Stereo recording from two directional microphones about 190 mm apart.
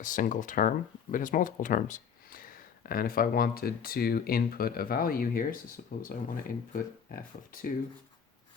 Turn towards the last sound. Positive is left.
turn(degrees=45)  # may be behind; listen again after turning